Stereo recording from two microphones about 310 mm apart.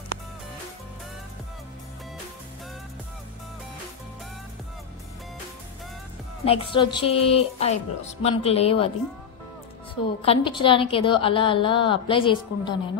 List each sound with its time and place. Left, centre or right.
6.4 s speech: centre
10.0 s a woman's voice: centre